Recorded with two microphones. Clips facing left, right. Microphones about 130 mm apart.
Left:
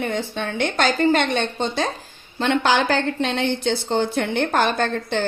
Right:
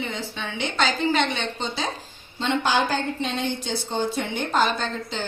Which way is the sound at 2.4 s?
75° left (ahead or behind).